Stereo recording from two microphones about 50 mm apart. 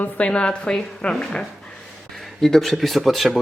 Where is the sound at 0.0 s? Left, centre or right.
Left.